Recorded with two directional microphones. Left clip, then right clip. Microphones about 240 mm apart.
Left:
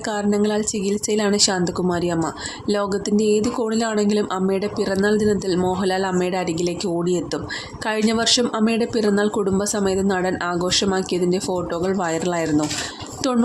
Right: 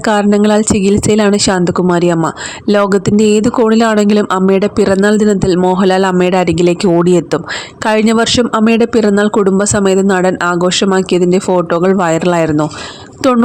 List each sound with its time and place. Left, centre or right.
0.0 s a woman's voice: right